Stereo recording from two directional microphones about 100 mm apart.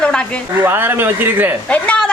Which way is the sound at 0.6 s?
20° right (ahead or behind).